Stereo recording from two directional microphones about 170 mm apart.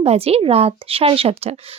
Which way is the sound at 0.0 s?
35° right (ahead or behind).